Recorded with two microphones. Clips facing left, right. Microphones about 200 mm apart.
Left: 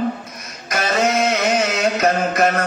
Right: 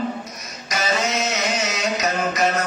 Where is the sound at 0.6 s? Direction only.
55° left (ahead or behind).